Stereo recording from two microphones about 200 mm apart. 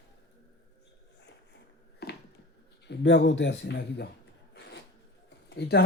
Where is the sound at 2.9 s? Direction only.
60° left (ahead or behind).